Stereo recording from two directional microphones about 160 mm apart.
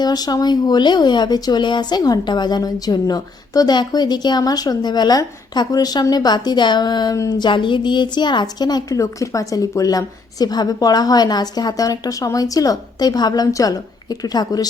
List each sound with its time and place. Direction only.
0.0 s speech: 25° left (ahead or behind)